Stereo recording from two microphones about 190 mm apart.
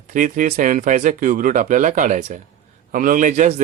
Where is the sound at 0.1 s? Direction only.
45° right (ahead or behind).